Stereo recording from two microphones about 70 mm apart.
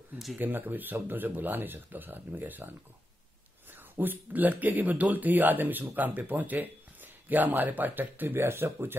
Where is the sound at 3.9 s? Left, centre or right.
Right.